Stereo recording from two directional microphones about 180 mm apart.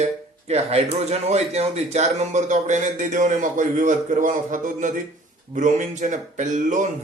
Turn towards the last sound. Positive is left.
turn(degrees=-45)  # may be behind; listen again after turning